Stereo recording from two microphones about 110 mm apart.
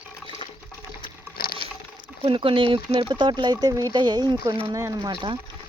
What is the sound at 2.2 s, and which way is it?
Speech, 50° right (ahead or behind).